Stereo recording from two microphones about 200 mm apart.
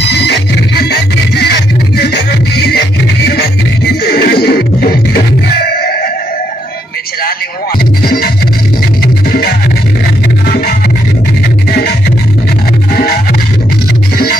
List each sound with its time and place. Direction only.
0.1 s music: 55° left (ahead or behind)
4.0 s music: 55° left (ahead or behind)
8.0 s music: 50° left (ahead or behind)
12.9 s music: 50° left (ahead or behind)